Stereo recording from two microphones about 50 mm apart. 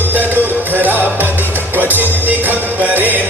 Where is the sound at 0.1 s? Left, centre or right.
Right.